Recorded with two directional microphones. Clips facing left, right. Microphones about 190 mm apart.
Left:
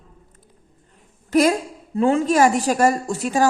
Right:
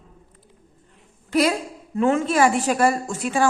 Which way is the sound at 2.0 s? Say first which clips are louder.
Left 2 dB; 35° left (ahead or behind).